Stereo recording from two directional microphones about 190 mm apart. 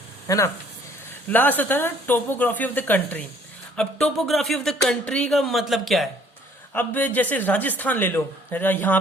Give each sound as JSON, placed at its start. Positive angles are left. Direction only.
{"t": 0.3, "sound": "speech", "side_deg": 15}